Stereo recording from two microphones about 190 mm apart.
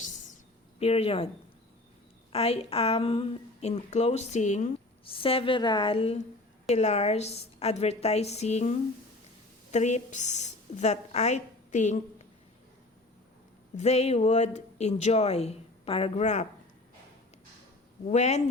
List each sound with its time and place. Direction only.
0.8 s a woman's voice: 30° left (ahead or behind)
2.3 s a woman's voice: 30° left (ahead or behind)
9.7 s a woman's voice: 40° left (ahead or behind)
13.7 s a woman's voice: 35° left (ahead or behind)
18.1 s a woman's voice: 35° left (ahead or behind)